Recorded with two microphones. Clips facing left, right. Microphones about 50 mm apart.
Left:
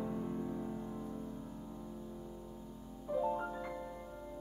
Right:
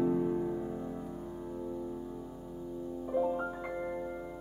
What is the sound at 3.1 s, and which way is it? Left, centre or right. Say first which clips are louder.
Music: right 3 dB; right.